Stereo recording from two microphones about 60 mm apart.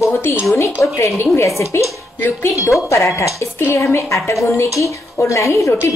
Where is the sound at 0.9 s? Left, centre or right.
Left.